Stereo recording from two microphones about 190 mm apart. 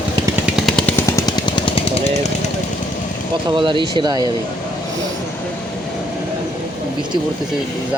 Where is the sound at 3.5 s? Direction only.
25° right (ahead or behind).